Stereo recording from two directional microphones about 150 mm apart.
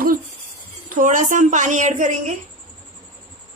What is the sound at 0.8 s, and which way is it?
A woman's voice, 60° right (ahead or behind).